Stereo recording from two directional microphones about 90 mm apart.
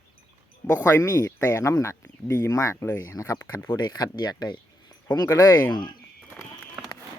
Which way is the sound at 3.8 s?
45° left (ahead or behind).